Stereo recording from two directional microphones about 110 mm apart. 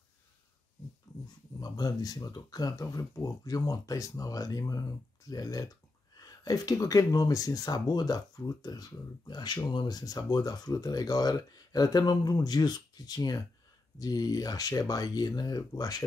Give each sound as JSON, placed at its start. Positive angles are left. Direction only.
{"t": 1.6, "sound": "speech", "side_deg": 35}